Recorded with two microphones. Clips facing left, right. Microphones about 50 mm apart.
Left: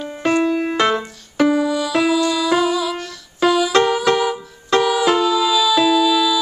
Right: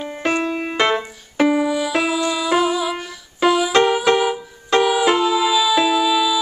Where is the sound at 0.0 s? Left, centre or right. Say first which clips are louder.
Left 3 dB; right.